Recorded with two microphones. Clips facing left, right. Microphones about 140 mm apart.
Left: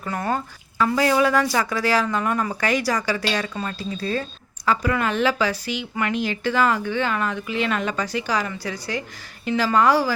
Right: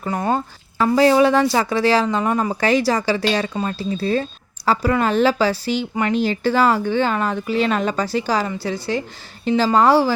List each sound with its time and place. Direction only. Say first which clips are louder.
0.0 s speech: right 4 dB; 25° right (ahead or behind)